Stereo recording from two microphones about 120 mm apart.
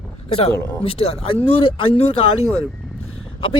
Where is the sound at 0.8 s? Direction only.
50° left (ahead or behind).